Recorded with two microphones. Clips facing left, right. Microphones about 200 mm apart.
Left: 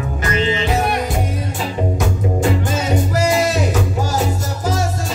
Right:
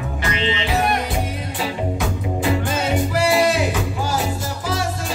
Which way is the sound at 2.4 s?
45° left (ahead or behind).